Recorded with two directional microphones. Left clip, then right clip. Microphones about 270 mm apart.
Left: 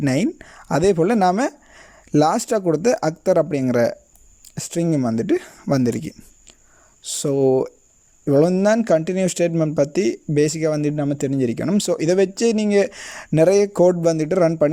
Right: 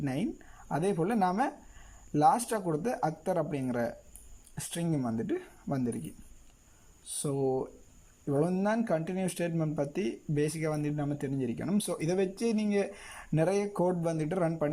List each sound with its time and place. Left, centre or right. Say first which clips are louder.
0.0 s speech: left 14 dB; left
7.2 s a man's voice: left 14 dB; left